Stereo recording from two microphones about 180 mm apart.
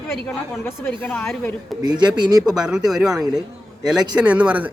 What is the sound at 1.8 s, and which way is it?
Speech, 25° right (ahead or behind).